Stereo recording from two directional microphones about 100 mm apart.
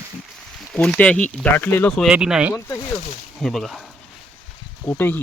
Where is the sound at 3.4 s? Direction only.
5° left (ahead or behind).